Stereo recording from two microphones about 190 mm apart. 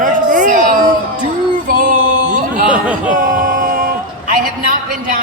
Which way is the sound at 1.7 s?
45° right (ahead or behind).